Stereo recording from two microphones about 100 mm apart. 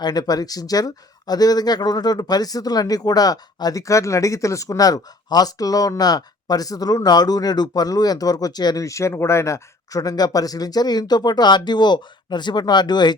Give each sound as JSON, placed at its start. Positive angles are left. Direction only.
{"t": 0.0, "sound": "speech", "side_deg": 40}